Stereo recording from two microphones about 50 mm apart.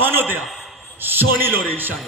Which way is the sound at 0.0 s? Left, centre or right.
Right.